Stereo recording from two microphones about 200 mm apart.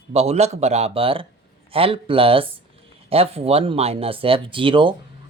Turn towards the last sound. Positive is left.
turn(degrees=-25)  # may be behind; listen again after turning